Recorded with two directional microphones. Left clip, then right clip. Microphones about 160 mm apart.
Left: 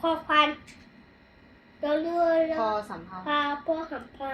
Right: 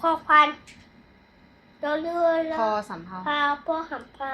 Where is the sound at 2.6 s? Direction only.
55° right (ahead or behind).